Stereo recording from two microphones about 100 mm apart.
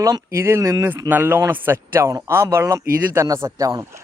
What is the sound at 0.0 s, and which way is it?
Speech, 35° right (ahead or behind).